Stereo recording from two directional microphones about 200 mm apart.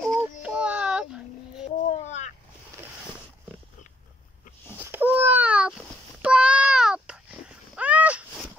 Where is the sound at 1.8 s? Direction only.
35° left (ahead or behind).